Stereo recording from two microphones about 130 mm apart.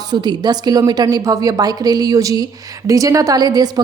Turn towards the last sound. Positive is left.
turn(degrees=-30)  # may be behind; listen again after turning